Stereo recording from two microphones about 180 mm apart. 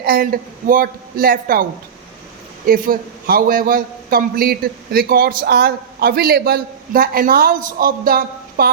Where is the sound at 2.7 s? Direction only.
55° right (ahead or behind).